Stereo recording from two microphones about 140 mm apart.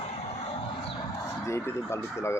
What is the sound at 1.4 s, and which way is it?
Speech, 20° left (ahead or behind).